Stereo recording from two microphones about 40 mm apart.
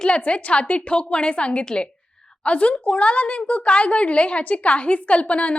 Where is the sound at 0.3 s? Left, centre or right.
Left.